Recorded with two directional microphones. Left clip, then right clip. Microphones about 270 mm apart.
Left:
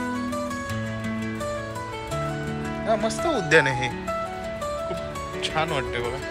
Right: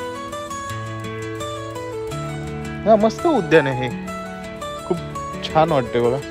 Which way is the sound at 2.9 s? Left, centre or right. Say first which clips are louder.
Right 9 dB; centre.